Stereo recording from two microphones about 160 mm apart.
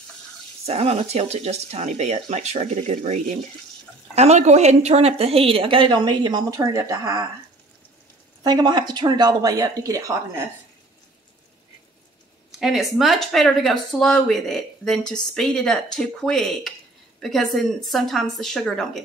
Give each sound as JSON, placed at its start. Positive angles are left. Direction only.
{"t": 0.7, "sound": "a woman's voice", "side_deg": -40}
{"t": 8.5, "sound": "a woman's voice", "side_deg": -25}
{"t": 12.5, "sound": "speech", "side_deg": 0}